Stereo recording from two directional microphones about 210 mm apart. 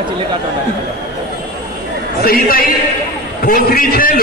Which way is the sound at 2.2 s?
45° left (ahead or behind).